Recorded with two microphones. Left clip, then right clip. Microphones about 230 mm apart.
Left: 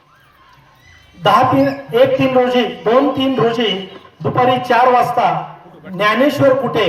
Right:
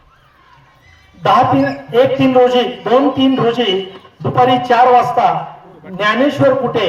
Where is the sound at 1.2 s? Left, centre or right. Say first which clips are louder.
Even; right.